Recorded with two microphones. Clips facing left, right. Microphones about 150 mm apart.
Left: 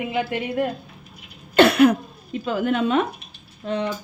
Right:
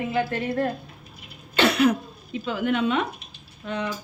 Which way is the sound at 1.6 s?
55° left (ahead or behind).